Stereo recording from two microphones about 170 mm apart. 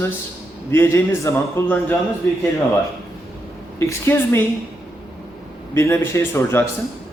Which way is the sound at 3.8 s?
15° left (ahead or behind).